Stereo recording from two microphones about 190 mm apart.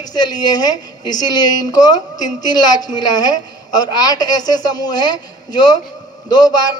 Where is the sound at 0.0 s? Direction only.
20° left (ahead or behind).